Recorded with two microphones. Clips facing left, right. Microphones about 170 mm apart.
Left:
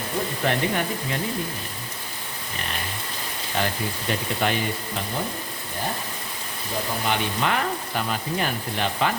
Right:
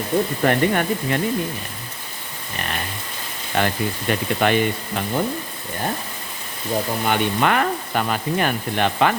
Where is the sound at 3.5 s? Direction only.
65° right (ahead or behind).